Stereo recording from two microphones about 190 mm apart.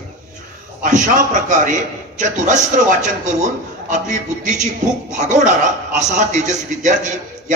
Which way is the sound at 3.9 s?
40° right (ahead or behind).